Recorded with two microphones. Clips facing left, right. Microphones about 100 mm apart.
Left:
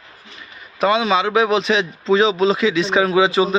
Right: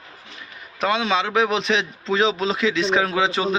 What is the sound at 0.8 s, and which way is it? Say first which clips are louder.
A man's voice: left 5 dB; centre (ahead or behind).